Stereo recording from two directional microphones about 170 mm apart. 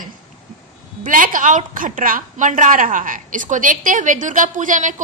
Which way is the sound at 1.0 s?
55° right (ahead or behind).